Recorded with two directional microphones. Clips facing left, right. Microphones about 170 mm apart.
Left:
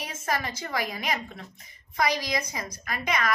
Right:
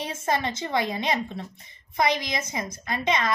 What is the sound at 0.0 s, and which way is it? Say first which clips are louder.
A woman's voice: right 4 dB; 30° right (ahead or behind).